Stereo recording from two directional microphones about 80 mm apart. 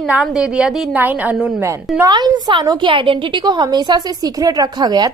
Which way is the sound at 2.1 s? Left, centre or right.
Right.